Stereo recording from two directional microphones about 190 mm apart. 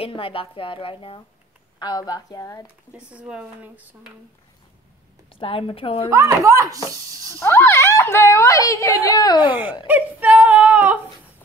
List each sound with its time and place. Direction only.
0.0 s speech: 30° left (ahead or behind)
2.6 s speech: 5° right (ahead or behind)
5.3 s speech: 30° left (ahead or behind)
6.0 s speech: 15° right (ahead or behind)
7.3 s speech: 10° left (ahead or behind)
9.5 s speech: 10° right (ahead or behind)